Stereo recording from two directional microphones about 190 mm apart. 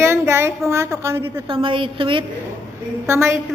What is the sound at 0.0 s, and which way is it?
A woman's voice, 15° right (ahead or behind).